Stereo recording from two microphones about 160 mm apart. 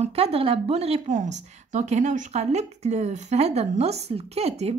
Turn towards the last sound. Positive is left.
turn(degrees=-40)  # may be behind; listen again after turning